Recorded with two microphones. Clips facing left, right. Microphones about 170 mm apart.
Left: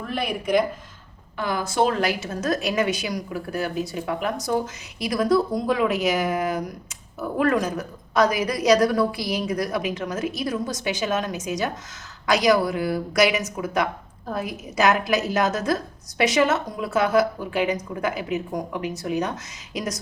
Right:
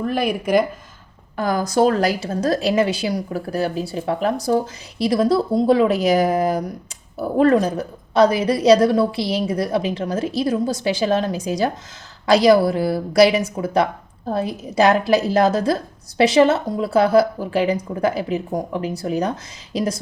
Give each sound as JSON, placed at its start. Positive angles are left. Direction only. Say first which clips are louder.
{"t": 0.2, "sound": "speech", "louder": "right 3 dB", "side_deg": 0}
{"t": 1.4, "sound": "a woman's voice", "louder": "right 5 dB", "side_deg": -40}